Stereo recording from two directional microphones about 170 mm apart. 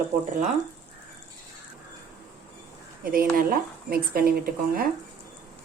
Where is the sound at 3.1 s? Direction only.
55° right (ahead or behind).